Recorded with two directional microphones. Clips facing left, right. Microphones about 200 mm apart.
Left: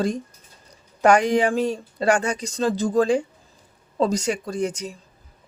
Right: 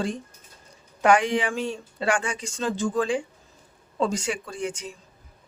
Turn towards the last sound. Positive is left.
turn(degrees=40)  # may be behind; listen again after turning